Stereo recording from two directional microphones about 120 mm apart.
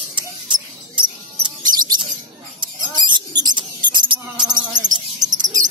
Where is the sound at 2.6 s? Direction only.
40° right (ahead or behind).